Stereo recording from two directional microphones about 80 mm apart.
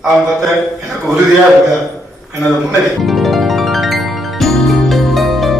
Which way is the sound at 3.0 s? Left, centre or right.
Centre.